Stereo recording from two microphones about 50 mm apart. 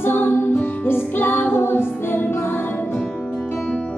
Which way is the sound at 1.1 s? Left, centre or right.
Left.